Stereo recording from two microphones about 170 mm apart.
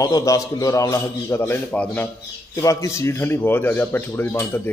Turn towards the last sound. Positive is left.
turn(degrees=15)  # may be behind; listen again after turning